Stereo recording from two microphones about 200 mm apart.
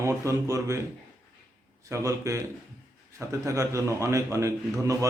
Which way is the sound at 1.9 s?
15° right (ahead or behind).